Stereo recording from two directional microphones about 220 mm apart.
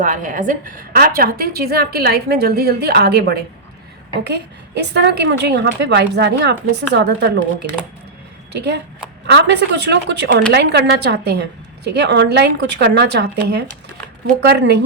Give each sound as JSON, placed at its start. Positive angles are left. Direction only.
{"t": 0.0, "sound": "a woman's voice", "side_deg": -35}
{"t": 9.2, "sound": "a woman's voice", "side_deg": -50}